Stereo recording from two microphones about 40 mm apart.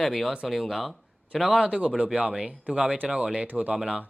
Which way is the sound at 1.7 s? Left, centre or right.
Right.